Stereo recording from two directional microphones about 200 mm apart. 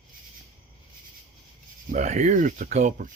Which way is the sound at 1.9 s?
35° right (ahead or behind).